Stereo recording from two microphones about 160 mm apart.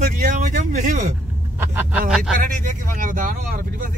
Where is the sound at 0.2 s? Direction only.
55° right (ahead or behind).